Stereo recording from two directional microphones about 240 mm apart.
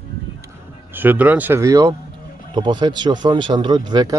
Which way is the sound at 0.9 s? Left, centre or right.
Centre.